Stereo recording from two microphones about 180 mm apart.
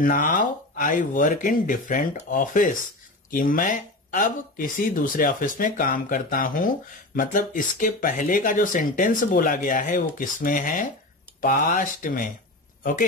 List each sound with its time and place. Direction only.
0.0 s speech: 45° left (ahead or behind)